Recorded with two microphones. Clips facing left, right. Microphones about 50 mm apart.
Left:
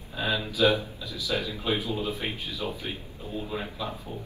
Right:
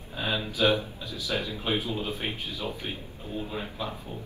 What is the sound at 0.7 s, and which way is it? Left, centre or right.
Speech, right.